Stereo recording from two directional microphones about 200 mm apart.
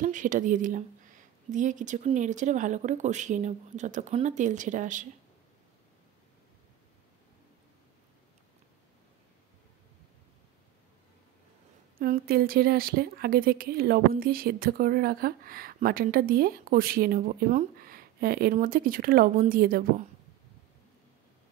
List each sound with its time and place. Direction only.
0.0 s speech: 40° right (ahead or behind)
12.0 s a woman's voice: 45° right (ahead or behind)